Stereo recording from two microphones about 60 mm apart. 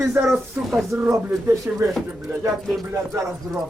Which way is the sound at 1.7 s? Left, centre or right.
Right.